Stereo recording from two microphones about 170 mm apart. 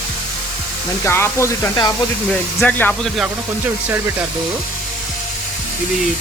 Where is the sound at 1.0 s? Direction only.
15° left (ahead or behind).